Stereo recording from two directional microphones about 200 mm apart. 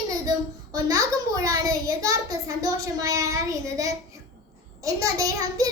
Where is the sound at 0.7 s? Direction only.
20° right (ahead or behind).